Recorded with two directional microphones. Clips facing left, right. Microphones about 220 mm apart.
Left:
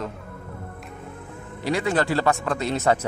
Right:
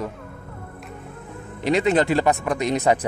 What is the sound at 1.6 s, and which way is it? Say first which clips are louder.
Speech: right 4 dB; 20° right (ahead or behind).